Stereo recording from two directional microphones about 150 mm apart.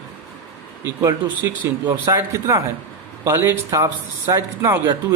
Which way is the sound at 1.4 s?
20° right (ahead or behind).